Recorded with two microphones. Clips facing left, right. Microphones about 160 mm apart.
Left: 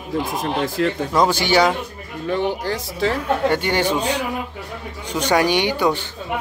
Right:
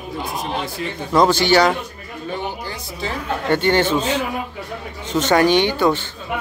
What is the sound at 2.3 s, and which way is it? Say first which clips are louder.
Speech: left 7 dB; 90° left.